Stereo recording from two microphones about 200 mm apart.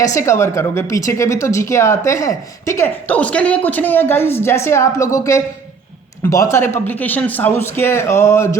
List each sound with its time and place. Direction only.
0.0 s a woman's voice: 15° left (ahead or behind)